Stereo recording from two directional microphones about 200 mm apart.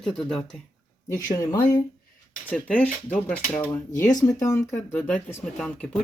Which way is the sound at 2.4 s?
5° left (ahead or behind).